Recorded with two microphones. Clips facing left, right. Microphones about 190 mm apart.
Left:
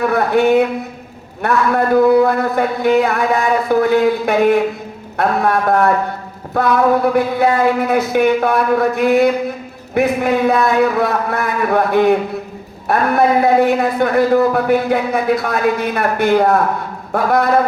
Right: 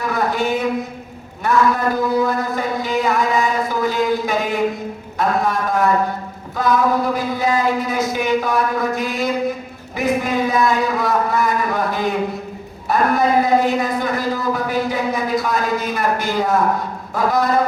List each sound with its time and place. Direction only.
0.0 s speech: 60° left (ahead or behind)